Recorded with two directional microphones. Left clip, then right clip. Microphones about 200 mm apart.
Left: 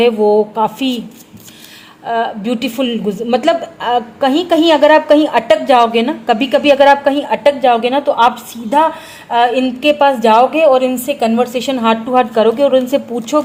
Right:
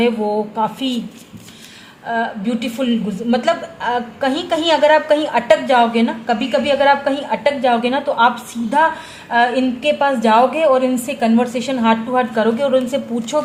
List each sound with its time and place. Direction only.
0.0 s a woman's voice: 35° left (ahead or behind)
2.0 s a woman's voice: 35° left (ahead or behind)
9.3 s a woman's voice: 40° left (ahead or behind)